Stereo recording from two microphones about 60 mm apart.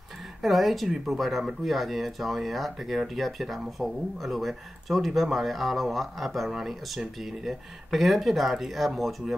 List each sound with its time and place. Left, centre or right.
0.4 s speech: centre